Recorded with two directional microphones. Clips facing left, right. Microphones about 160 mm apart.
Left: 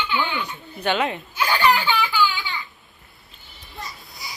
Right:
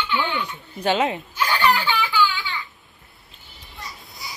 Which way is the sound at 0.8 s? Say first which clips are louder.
Right 2 dB; 35° right (ahead or behind).